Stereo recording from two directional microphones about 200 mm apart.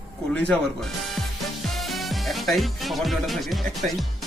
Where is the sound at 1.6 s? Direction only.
Centre (ahead or behind).